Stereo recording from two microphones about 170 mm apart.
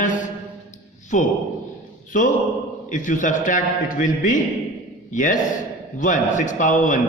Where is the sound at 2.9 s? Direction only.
50° left (ahead or behind).